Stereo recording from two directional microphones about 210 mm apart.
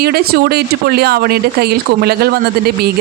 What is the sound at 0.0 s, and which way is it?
Speech, 45° right (ahead or behind).